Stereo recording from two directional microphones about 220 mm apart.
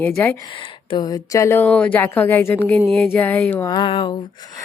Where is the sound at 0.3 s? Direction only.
20° left (ahead or behind).